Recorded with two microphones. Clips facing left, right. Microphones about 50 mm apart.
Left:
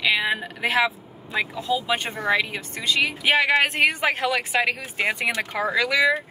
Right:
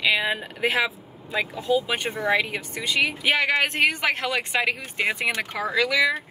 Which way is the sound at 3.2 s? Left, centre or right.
Centre.